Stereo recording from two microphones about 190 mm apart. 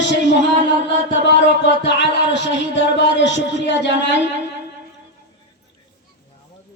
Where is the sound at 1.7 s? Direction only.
70° left (ahead or behind).